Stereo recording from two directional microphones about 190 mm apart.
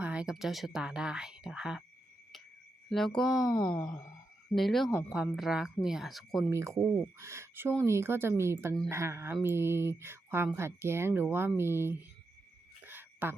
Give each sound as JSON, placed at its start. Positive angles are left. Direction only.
{"t": 0.0, "sound": "speech", "side_deg": -5}
{"t": 2.9, "sound": "speech", "side_deg": 0}
{"t": 3.2, "sound": "speech", "side_deg": 20}
{"t": 4.5, "sound": "speech", "side_deg": 0}
{"t": 4.9, "sound": "speech", "side_deg": 10}
{"t": 5.1, "sound": "speech", "side_deg": 0}
{"t": 6.5, "sound": "speech", "side_deg": -15}
{"t": 12.8, "sound": "a sound", "side_deg": -10}